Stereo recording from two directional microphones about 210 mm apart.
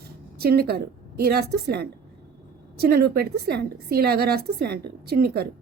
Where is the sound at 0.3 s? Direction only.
50° right (ahead or behind).